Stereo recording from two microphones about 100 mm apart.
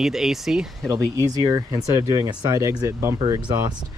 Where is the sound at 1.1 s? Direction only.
35° right (ahead or behind).